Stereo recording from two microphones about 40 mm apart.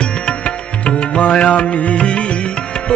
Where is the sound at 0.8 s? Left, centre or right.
Left.